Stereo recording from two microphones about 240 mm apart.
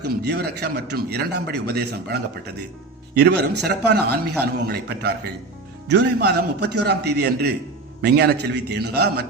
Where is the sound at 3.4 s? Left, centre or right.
Right.